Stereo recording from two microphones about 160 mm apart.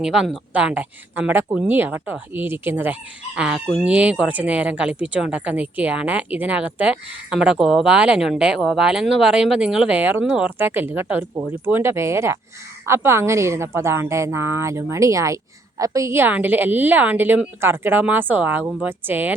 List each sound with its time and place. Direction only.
0.0 s speech: 5° right (ahead or behind)